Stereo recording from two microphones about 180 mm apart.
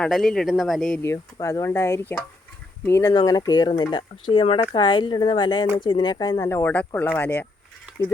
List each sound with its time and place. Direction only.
0.0 s speech: 5° left (ahead or behind)
1.0 s speech: 15° left (ahead or behind)